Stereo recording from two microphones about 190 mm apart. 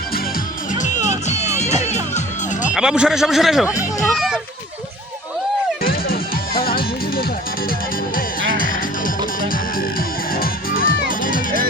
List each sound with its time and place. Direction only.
0.7 s music: 40° left (ahead or behind)
2.7 s a man's voice: 5° right (ahead or behind)
4.0 s music: centre (ahead or behind)
5.8 s music: 50° left (ahead or behind)